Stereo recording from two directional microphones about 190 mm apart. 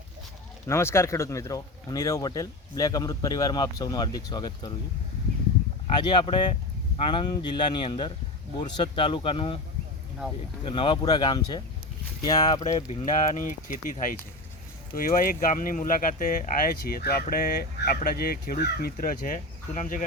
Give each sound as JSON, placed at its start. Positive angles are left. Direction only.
{"t": 0.7, "sound": "speech", "side_deg": 15}
{"t": 6.0, "sound": "speech", "side_deg": 25}
{"t": 10.7, "sound": "speech", "side_deg": 25}
{"t": 12.7, "sound": "speech", "side_deg": 40}